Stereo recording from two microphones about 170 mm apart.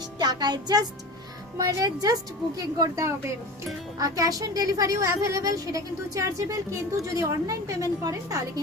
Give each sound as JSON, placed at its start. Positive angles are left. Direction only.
{"t": 0.2, "sound": "a woman's voice", "side_deg": -25}